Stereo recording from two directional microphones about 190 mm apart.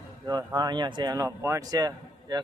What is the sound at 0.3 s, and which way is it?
Speech, 20° right (ahead or behind).